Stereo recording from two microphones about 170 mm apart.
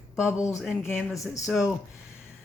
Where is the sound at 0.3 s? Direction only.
15° left (ahead or behind).